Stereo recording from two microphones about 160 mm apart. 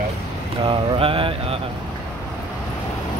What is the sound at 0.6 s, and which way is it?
Mantra, 35° right (ahead or behind).